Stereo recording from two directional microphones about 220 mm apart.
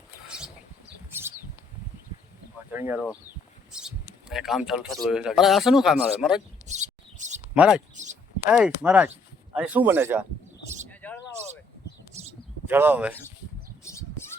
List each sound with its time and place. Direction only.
0.3 s a sound: 5° right (ahead or behind)
1.1 s bird: 10° right (ahead or behind)
2.7 s speech: 10° right (ahead or behind)
6.7 s bird: 35° right (ahead or behind)
7.5 s speech: 5° right (ahead or behind)
7.9 s a sound: 35° right (ahead or behind)
8.4 s speech: 5° right (ahead or behind)
10.8 s a sound: 5° left (ahead or behind)
12.1 s bird: 30° right (ahead or behind)
12.6 s speech: 10° right (ahead or behind)